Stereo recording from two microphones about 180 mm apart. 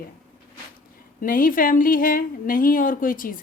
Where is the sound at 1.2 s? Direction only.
50° left (ahead or behind).